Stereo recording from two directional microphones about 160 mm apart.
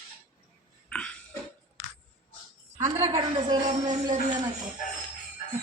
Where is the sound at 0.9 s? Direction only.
5° left (ahead or behind).